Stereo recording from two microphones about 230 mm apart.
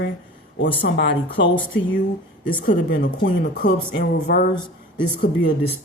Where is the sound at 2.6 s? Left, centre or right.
Left.